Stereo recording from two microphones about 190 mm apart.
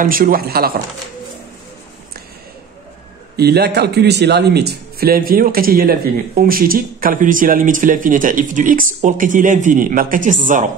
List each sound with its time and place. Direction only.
0.0 s a man's voice: 50° right (ahead or behind)
3.3 s a man's voice: 55° right (ahead or behind); by 10.7 s 40° right (ahead or behind)